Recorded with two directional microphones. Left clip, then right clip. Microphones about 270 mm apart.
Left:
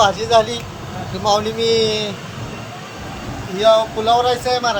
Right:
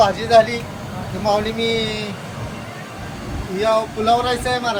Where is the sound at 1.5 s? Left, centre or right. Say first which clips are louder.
Left 5 dB; left.